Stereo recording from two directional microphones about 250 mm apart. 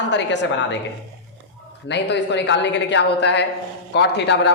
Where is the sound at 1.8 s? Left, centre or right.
Left.